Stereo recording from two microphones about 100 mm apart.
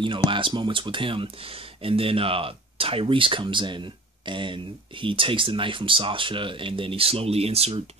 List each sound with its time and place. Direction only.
0.0 s speech: 55° right (ahead or behind); by 7.8 s 85° right